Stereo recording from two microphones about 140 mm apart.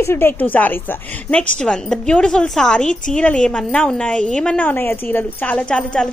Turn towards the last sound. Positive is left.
turn(degrees=5)  # may be behind; listen again after turning